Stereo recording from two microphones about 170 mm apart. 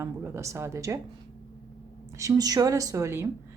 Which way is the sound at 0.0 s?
15° right (ahead or behind).